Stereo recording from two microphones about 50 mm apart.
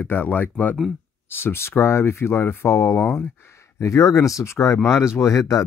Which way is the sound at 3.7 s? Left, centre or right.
Left.